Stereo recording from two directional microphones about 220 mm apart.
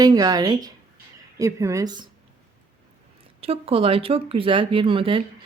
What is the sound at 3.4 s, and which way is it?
A woman's voice, 25° right (ahead or behind).